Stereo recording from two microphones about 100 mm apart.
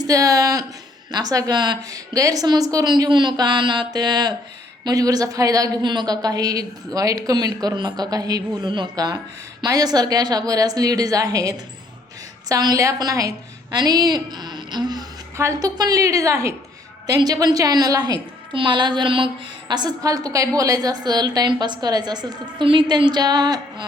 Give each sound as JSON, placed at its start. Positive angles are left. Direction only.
{"t": 0.0, "sound": "a woman's voice", "side_deg": -35}
{"t": 2.1, "sound": "a woman's voice", "side_deg": -35}
{"t": 2.9, "sound": "a woman's voice", "side_deg": -50}
{"t": 15.4, "sound": "a woman's voice", "side_deg": -35}
{"t": 17.1, "sound": "a woman's voice", "side_deg": -40}
{"t": 22.6, "sound": "a woman's voice", "side_deg": -55}